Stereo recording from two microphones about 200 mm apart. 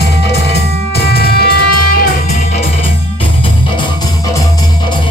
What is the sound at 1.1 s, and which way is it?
Music, 50° left (ahead or behind).